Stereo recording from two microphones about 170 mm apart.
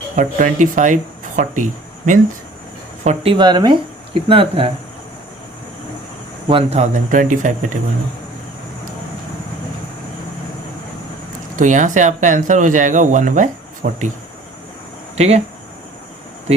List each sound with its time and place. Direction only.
0.2 s speech: 50° right (ahead or behind)
3.3 s speech: 25° right (ahead or behind)
6.5 s speech: 35° right (ahead or behind)
11.5 s speech: 45° right (ahead or behind)
15.1 s speech: 40° right (ahead or behind)